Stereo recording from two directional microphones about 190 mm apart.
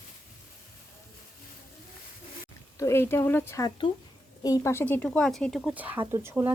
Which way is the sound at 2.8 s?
15° left (ahead or behind).